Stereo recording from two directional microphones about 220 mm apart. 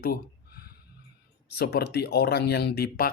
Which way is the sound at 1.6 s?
45° left (ahead or behind).